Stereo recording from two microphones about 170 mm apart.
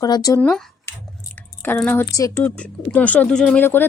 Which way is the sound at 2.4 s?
10° left (ahead or behind).